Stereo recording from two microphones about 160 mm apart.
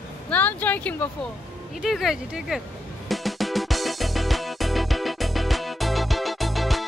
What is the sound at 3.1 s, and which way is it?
Music, centre (ahead or behind).